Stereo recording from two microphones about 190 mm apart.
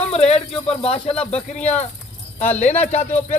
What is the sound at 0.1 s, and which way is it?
Speech, 30° left (ahead or behind).